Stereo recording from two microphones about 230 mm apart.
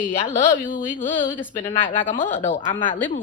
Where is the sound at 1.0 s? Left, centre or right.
Left.